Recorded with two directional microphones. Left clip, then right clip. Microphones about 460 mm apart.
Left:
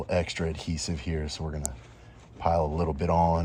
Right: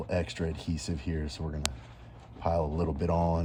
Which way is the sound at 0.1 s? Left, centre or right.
Centre.